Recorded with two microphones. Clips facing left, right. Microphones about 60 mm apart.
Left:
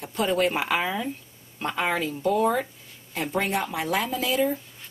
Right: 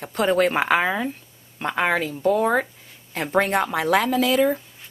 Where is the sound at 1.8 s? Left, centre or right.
Right.